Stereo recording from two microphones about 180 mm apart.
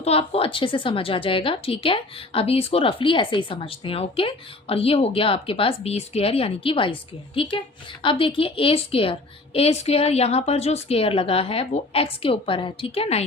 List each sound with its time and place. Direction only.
0.0 s a woman's voice: 35° left (ahead or behind)